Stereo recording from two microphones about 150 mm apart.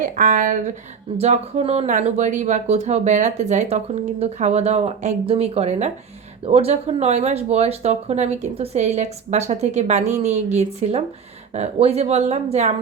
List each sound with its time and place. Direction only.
0.0 s speech: 60° right (ahead or behind)
1.2 s speech: 45° right (ahead or behind)